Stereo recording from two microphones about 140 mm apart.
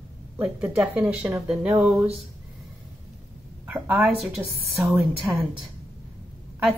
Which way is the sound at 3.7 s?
10° right (ahead or behind).